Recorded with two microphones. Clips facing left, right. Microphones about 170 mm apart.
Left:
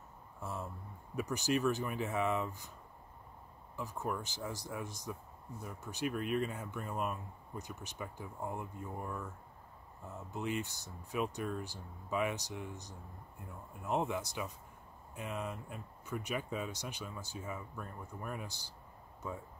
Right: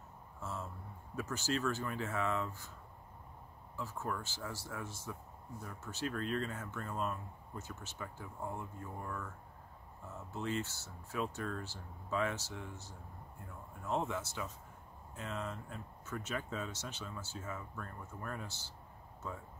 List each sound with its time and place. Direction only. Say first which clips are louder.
0.4 s a sound: left 1 dB; 15° left (ahead or behind)
1.1 s speech: left 3 dB; 15° left (ahead or behind)
3.7 s speech: left 2 dB; 15° left (ahead or behind)